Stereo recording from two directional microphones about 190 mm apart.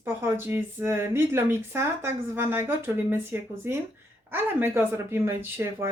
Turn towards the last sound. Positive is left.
turn(degrees=-10)  # may be behind; listen again after turning